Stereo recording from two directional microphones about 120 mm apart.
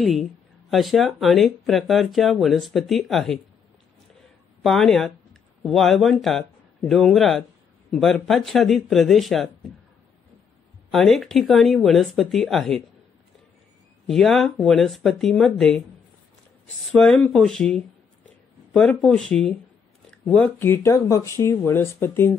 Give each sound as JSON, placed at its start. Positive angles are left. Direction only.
{"t": 0.0, "sound": "speech", "side_deg": 0}
{"t": 4.6, "sound": "speech", "side_deg": 5}
{"t": 10.9, "sound": "speech", "side_deg": 0}
{"t": 14.0, "sound": "speech", "side_deg": 5}